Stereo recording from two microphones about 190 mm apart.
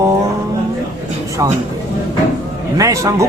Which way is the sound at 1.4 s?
15° right (ahead or behind).